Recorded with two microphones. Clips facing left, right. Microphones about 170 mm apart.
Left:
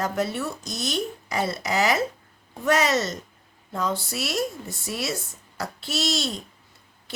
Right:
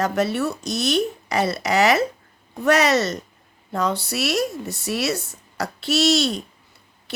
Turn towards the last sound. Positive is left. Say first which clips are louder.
# right 8 dB
turn(degrees=-70)  # may be behind; listen again after turning